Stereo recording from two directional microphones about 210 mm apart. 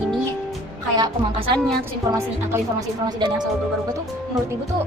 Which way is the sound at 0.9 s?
20° right (ahead or behind).